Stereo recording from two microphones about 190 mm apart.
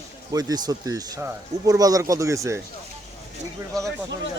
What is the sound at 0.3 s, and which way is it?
Speech, 20° right (ahead or behind).